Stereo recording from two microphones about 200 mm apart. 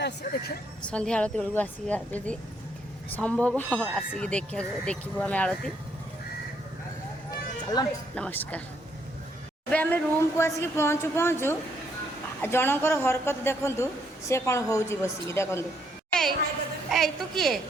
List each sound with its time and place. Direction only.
0.0 s vehicle: 60° left (ahead or behind)
0.8 s speech: 5° left (ahead or behind)
7.3 s a sound: 20° left (ahead or behind)
8.1 s speech: 5° left (ahead or behind)
9.6 s speech: 10° left (ahead or behind)
16.9 s speech: centre (ahead or behind)